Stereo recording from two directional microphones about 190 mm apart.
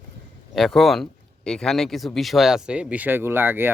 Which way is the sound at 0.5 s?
Centre (ahead or behind).